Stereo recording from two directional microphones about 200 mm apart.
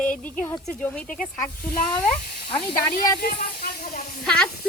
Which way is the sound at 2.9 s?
50° left (ahead or behind).